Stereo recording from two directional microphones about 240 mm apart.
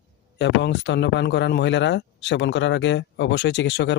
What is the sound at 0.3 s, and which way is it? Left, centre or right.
Speech, left.